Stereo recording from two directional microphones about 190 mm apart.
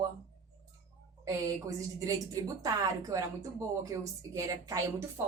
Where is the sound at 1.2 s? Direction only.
15° right (ahead or behind).